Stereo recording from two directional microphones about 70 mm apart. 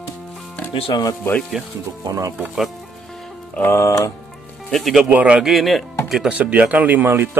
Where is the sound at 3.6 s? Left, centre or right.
Left.